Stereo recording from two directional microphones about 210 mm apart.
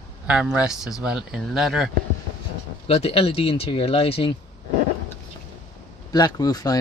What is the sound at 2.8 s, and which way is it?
Speech, 30° left (ahead or behind).